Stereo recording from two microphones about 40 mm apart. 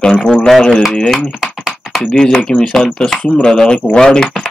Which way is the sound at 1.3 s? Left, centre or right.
Centre.